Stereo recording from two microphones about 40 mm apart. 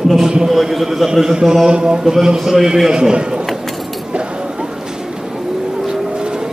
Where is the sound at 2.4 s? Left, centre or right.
Centre.